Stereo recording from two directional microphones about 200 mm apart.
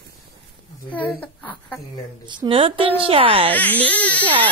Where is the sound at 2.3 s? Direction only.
25° right (ahead or behind).